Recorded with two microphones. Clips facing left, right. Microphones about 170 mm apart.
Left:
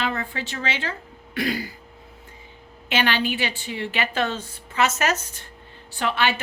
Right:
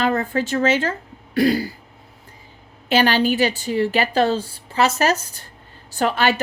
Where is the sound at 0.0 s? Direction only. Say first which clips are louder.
Right 8 dB; 45° right (ahead or behind).